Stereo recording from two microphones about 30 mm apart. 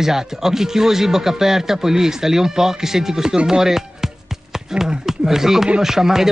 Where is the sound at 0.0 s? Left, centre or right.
Centre.